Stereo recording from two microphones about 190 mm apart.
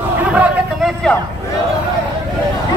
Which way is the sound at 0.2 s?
5° right (ahead or behind).